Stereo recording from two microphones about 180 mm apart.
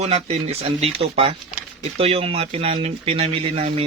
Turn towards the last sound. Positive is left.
turn(degrees=-35)  # may be behind; listen again after turning